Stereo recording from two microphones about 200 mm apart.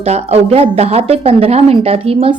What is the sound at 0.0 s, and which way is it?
A woman's voice, 30° right (ahead or behind).